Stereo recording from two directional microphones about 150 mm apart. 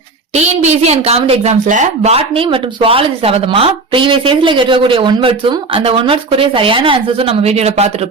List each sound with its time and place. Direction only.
0.3 s a woman's voice: 50° right (ahead or behind)